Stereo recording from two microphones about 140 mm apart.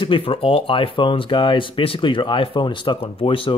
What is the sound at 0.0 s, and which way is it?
Speech, 40° left (ahead or behind).